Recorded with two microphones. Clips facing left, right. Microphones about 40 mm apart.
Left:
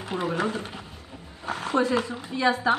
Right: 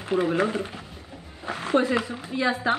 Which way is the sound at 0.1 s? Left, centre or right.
Right.